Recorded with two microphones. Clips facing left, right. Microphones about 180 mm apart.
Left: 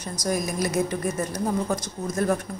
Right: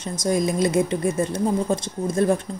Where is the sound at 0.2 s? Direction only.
25° right (ahead or behind).